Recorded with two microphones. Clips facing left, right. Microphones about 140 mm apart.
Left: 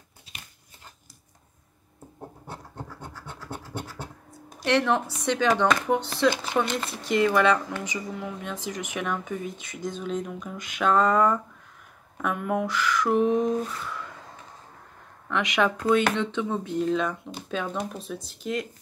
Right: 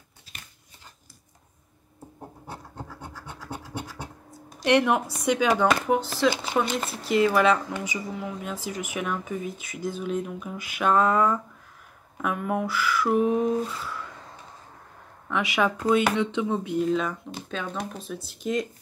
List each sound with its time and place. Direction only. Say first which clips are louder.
4.6 s speech: right 2 dB; 15° right (ahead or behind)
15.2 s speech: even; 5° right (ahead or behind)
18.4 s speech: right 3 dB; 20° right (ahead or behind)